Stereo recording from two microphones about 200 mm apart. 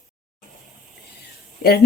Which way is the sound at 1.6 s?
50° left (ahead or behind).